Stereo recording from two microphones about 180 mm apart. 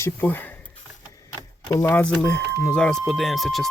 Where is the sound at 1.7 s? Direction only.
15° left (ahead or behind).